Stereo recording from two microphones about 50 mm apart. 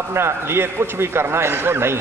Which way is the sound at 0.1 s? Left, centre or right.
Right.